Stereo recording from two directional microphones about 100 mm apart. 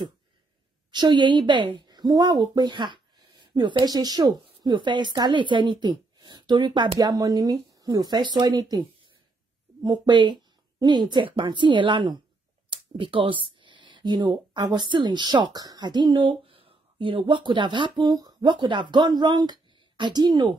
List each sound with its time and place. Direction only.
0.9 s a woman's voice: 50° right (ahead or behind)
7.0 s speech: 40° right (ahead or behind)
7.9 s a woman's voice: 45° right (ahead or behind)
9.8 s a woman's voice: 50° right (ahead or behind)